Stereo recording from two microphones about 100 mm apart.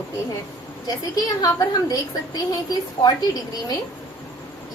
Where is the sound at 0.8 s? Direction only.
40° left (ahead or behind).